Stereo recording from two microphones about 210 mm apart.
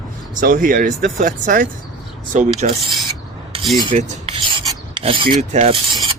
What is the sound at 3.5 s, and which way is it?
Cutlery, 25° right (ahead or behind).